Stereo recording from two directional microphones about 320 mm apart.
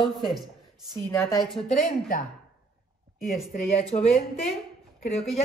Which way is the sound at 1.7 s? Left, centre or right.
Left.